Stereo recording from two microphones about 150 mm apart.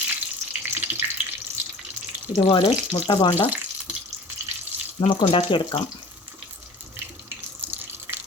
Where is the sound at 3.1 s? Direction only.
30° left (ahead or behind).